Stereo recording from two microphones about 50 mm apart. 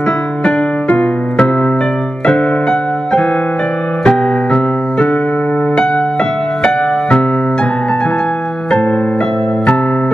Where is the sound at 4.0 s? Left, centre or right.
Centre.